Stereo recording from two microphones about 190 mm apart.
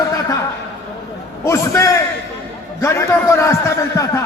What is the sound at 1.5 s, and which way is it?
A man's voice, 15° left (ahead or behind).